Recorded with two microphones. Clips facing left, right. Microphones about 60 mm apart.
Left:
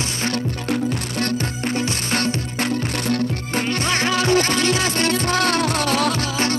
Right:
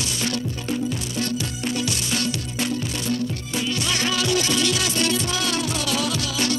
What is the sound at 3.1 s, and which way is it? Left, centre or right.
Music, left.